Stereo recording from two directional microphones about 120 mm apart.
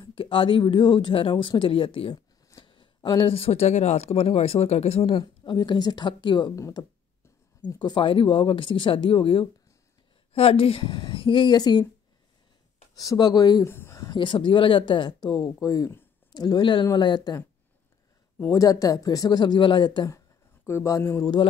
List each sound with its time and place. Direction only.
0.0 s speech: 45° left (ahead or behind)
5.1 s speech: 40° left (ahead or behind)
6.5 s speech: 25° left (ahead or behind)
7.6 s speech: 35° left (ahead or behind)
12.9 s speech: 30° left (ahead or behind)
13.7 s a sound: 20° left (ahead or behind)
14.1 s speech: 45° left (ahead or behind)
18.4 s speech: 30° left (ahead or behind)
20.6 s speech: 25° left (ahead or behind)